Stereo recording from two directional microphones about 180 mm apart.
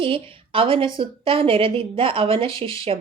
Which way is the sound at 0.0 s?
30° right (ahead or behind).